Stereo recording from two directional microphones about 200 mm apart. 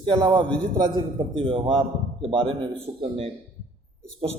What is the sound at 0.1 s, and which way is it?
A man's voice, 25° right (ahead or behind).